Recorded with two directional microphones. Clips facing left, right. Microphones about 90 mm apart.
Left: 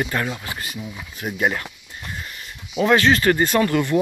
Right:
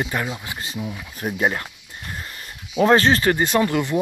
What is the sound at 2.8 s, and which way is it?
Speech, 35° right (ahead or behind).